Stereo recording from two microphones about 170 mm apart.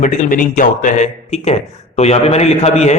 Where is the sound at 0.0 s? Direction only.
45° left (ahead or behind).